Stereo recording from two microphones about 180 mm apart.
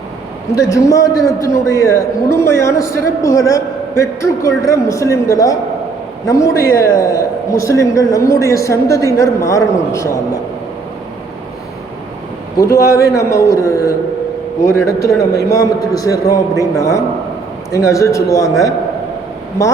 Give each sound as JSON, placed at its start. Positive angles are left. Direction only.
{"t": 0.5, "sound": "a man's voice", "side_deg": 15}
{"t": 12.6, "sound": "a man's voice", "side_deg": 15}